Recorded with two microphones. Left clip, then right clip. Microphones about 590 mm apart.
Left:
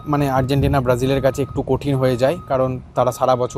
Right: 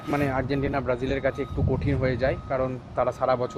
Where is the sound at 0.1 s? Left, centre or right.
Left.